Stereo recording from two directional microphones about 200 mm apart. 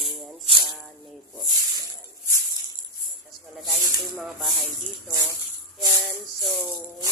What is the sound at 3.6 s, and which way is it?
Speech, centre (ahead or behind).